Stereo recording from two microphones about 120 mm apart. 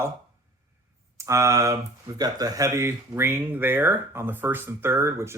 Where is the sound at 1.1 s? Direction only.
25° right (ahead or behind).